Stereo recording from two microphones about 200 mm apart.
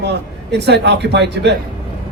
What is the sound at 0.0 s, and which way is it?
Speech, 60° right (ahead or behind).